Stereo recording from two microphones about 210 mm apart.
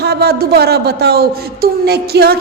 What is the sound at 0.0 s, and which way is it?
A woman's voice, 50° right (ahead or behind).